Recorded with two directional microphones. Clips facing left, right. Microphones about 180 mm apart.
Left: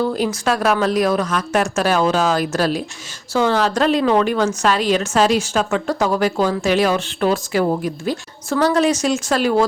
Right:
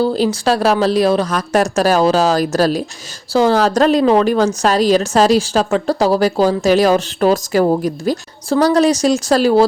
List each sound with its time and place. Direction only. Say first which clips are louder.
0.0 s a woman's voice: right 4 dB; 30° right (ahead or behind)